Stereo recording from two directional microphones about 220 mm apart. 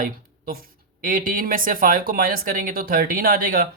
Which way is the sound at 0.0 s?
40° right (ahead or behind).